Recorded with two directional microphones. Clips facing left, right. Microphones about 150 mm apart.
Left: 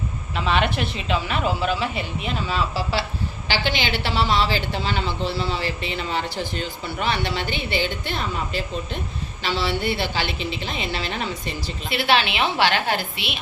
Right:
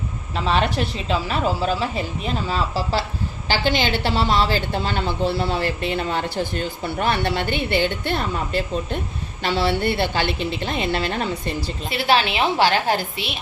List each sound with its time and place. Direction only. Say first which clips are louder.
0.3 s a woman's voice: right 1 dB; 35° right (ahead or behind)